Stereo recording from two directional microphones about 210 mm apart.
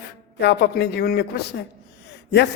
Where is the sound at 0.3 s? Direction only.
55° left (ahead or behind).